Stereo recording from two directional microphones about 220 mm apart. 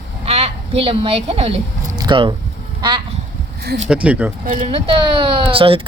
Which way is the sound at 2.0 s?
20° right (ahead or behind).